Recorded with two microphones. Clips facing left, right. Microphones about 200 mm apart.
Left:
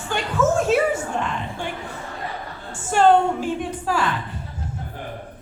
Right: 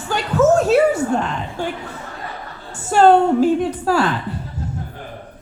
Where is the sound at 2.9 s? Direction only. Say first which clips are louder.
Right 4 dB; 40° right (ahead or behind).